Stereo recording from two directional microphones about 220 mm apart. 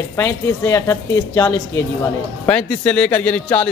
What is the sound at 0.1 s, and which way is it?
A man's voice, 10° left (ahead or behind).